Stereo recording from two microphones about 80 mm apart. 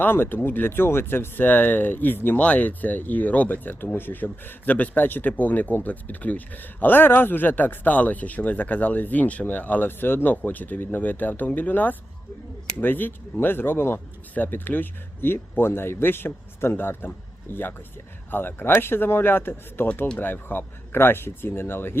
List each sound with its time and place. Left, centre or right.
0.0 s speech: left